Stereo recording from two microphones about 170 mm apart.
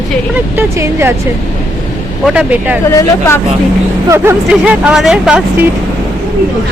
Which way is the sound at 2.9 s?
15° left (ahead or behind).